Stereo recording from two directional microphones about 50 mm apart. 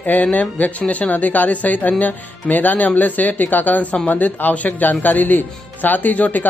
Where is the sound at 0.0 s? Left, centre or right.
Left.